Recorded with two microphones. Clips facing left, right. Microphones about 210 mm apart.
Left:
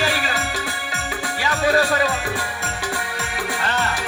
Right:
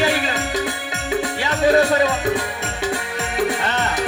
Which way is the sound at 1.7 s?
20° right (ahead or behind).